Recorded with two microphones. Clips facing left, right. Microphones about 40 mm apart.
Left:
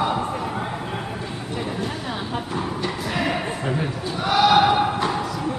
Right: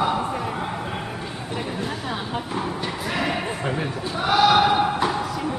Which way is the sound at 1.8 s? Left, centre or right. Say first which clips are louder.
Even; centre.